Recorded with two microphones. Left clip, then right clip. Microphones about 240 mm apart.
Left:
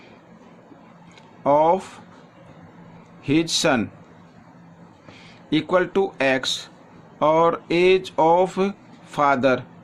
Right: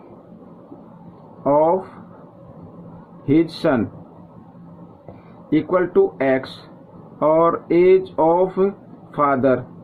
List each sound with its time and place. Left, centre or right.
1.5 s speech: left
3.2 s speech: left
5.5 s speech: left